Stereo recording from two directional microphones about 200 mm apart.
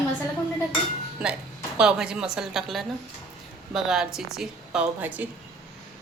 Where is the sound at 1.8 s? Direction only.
5° right (ahead or behind).